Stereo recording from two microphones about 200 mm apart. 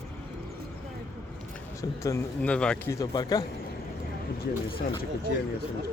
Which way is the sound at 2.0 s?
10° left (ahead or behind).